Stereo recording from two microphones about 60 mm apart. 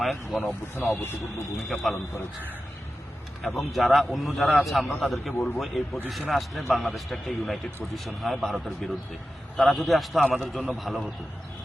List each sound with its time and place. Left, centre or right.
0.0 s a man's voice: centre
0.9 s speech: left
1.7 s a man's voice: centre
3.4 s a man's voice: centre